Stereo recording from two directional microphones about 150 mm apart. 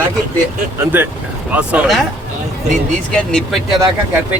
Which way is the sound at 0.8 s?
15° right (ahead or behind).